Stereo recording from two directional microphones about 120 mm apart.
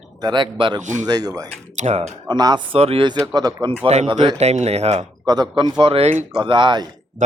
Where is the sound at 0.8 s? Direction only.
90° right.